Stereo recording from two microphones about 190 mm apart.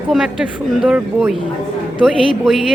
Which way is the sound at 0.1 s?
Centre (ahead or behind).